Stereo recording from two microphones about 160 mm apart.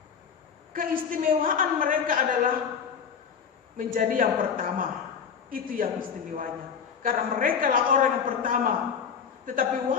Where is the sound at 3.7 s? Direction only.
60° right (ahead or behind).